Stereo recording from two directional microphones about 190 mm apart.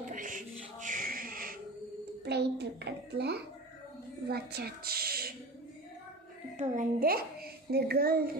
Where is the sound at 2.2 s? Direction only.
60° right (ahead or behind).